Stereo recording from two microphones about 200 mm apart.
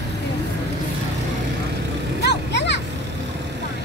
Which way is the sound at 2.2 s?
60° left (ahead or behind).